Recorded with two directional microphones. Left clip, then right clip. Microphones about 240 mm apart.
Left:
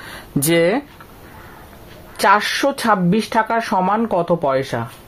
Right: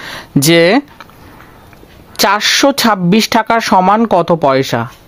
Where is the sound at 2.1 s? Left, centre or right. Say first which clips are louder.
Right 4 dB; right.